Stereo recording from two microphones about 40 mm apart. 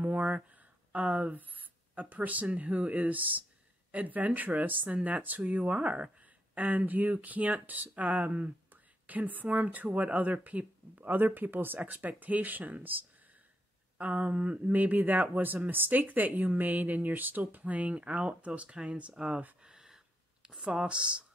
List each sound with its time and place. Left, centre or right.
0.0 s a sound: right
0.9 s speech: right
6.6 s speech: right
11.0 s speech: right
14.7 s speech: right
19.6 s a sound: centre
20.4 s speech: centre